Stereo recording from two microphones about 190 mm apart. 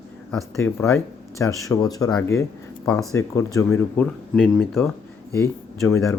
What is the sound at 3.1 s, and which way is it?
Speech, 15° left (ahead or behind).